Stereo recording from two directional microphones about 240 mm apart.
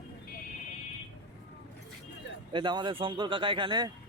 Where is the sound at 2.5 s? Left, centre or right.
Centre.